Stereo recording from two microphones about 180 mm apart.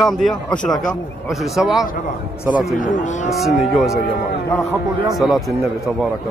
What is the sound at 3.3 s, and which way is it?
Speech, centre (ahead or behind).